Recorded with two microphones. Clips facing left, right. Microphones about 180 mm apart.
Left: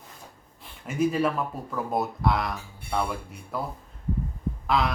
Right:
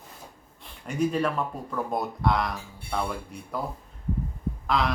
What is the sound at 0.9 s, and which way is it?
Speech, 5° left (ahead or behind).